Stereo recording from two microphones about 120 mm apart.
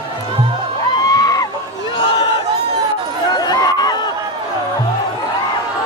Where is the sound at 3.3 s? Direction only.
35° left (ahead or behind).